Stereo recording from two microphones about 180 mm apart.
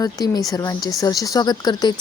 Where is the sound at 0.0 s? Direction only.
20° left (ahead or behind).